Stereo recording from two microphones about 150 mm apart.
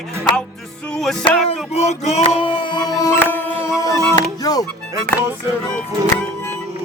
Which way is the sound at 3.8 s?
25° left (ahead or behind).